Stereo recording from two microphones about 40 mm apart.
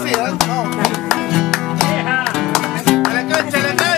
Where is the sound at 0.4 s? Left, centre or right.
Centre.